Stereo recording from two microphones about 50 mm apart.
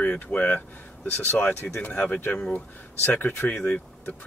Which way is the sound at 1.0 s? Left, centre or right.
Left.